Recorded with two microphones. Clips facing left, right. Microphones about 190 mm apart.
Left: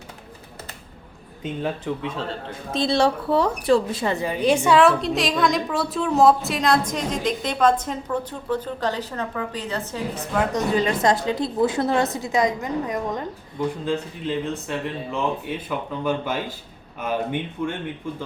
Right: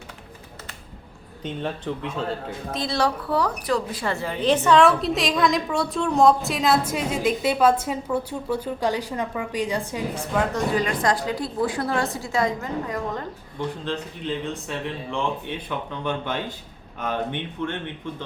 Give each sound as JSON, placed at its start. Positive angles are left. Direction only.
{"t": 1.4, "sound": "speech", "side_deg": 5}
{"t": 2.7, "sound": "a woman's voice", "side_deg": 25}
{"t": 4.8, "sound": "a woman's voice", "side_deg": 0}
{"t": 10.5, "sound": "a woman's voice", "side_deg": 25}
{"t": 13.8, "sound": "speech", "side_deg": 5}